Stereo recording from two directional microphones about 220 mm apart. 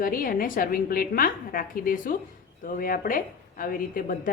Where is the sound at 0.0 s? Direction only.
40° left (ahead or behind).